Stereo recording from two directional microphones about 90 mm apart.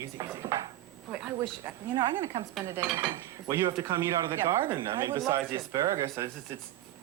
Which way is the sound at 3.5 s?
40° right (ahead or behind).